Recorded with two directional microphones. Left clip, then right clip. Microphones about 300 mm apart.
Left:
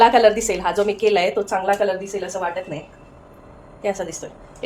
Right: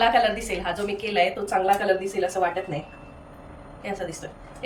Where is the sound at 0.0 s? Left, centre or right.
Centre.